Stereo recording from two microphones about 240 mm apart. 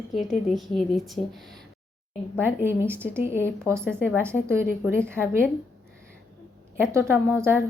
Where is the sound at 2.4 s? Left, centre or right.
Centre.